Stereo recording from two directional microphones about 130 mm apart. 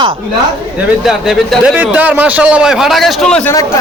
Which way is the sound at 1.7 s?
15° right (ahead or behind).